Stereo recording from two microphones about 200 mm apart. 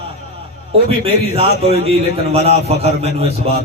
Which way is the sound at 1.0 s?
30° right (ahead or behind).